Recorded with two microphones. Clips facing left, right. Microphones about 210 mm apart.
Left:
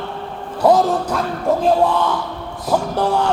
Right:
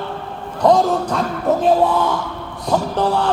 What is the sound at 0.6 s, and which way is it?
Speech, 5° left (ahead or behind).